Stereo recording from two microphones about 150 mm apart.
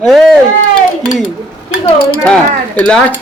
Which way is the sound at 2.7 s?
10° left (ahead or behind).